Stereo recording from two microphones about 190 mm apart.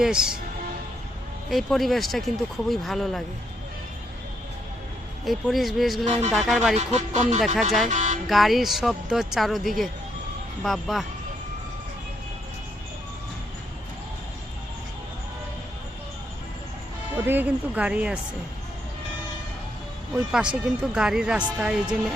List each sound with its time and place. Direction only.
0.0 s speech: 5° right (ahead or behind)
1.5 s speech: centre (ahead or behind)
5.2 s speech: centre (ahead or behind)
6.7 s speech: 35° right (ahead or behind)
8.3 s speech: centre (ahead or behind)
17.2 s speech: 10° right (ahead or behind)
20.1 s speech: 5° right (ahead or behind)